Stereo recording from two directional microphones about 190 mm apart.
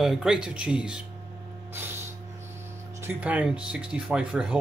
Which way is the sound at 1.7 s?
10° right (ahead or behind).